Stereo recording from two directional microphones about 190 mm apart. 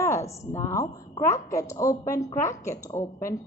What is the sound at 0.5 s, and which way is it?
A woman's voice, 15° left (ahead or behind).